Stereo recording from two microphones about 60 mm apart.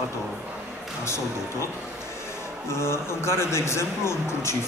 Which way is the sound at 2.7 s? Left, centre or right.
Left.